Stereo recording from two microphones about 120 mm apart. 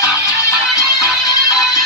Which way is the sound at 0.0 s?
25° left (ahead or behind).